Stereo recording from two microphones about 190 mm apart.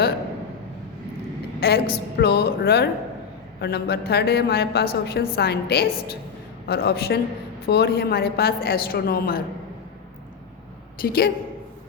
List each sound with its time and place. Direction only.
1.6 s a woman's voice: 60° left (ahead or behind)
11.0 s a man's voice: 55° left (ahead or behind)